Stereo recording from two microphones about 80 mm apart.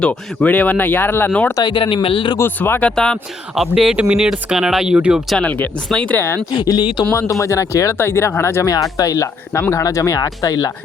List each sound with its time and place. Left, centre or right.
0.0 s speech: centre
1.5 s speech: left
2.4 s speech: left
2.9 s speech: centre
3.5 s speech: centre
5.4 s speech: centre
6.1 s speech: left
7.1 s speech: left
8.6 s speech: left
9.8 s speech: left